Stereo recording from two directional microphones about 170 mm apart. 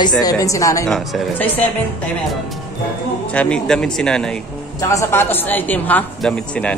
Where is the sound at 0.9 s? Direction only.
Centre (ahead or behind).